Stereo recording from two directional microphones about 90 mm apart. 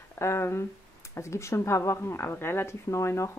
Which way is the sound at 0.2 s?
30° left (ahead or behind).